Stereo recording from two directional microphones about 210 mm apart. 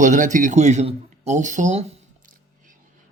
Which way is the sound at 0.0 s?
35° right (ahead or behind).